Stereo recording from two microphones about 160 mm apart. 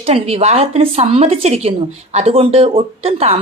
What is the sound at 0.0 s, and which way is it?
Speech, 40° right (ahead or behind).